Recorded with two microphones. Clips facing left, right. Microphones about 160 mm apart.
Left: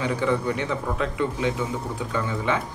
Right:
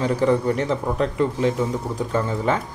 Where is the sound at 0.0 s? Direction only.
35° right (ahead or behind).